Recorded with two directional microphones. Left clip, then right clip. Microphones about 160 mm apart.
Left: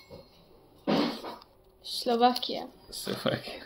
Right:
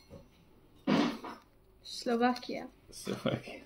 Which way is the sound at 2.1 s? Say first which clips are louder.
Left 6 dB; 45° left (ahead or behind).